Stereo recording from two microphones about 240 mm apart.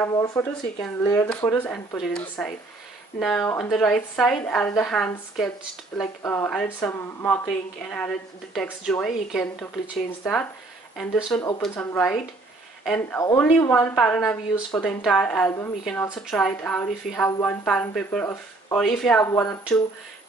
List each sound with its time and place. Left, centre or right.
0.0 s a woman's voice: centre